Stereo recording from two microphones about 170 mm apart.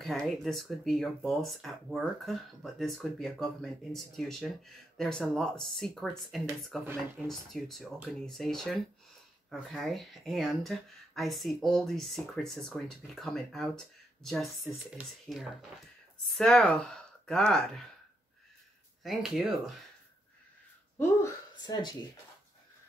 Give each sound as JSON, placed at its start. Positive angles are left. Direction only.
{"t": 0.0, "sound": "speech", "side_deg": 0}
{"t": 19.0, "sound": "speech", "side_deg": 0}
{"t": 21.0, "sound": "speech", "side_deg": 20}